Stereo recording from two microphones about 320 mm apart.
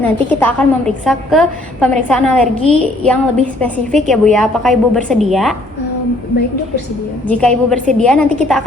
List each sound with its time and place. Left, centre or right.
0.0 s a woman's voice: centre
7.3 s a woman's voice: centre